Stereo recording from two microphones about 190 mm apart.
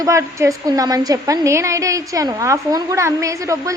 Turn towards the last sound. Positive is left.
turn(degrees=-15)  # may be behind; listen again after turning